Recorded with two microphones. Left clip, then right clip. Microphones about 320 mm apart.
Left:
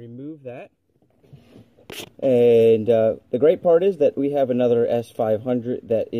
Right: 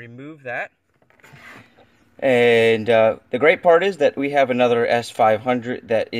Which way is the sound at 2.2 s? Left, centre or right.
Right.